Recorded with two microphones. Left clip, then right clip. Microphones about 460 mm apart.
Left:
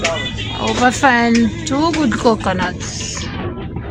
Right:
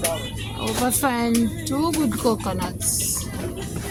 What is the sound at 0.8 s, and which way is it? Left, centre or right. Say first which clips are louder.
Speech: left 11 dB; right.